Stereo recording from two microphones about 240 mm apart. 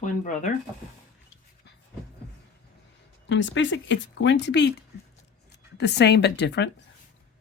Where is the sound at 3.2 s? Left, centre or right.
Left.